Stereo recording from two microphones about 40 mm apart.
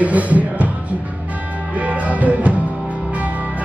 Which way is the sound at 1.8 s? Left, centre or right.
Right.